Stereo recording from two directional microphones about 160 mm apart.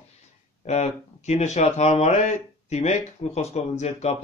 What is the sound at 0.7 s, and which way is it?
Speech, 45° left (ahead or behind).